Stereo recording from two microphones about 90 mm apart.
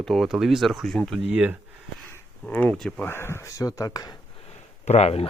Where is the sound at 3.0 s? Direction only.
25° left (ahead or behind); by 4.1 s 45° left (ahead or behind).